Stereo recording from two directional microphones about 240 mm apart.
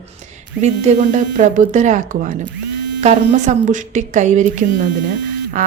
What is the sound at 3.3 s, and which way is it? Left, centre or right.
A woman's voice, right.